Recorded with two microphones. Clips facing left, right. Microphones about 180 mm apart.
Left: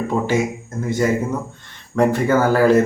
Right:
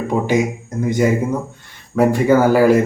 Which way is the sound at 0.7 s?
15° right (ahead or behind).